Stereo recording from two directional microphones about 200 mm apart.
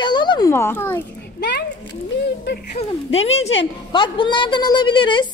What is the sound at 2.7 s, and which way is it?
A woman's voice, 30° left (ahead or behind).